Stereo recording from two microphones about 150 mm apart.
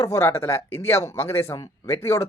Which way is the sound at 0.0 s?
15° left (ahead or behind).